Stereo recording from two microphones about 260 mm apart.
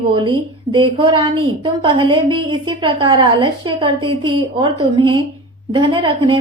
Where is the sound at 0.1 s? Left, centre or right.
Centre.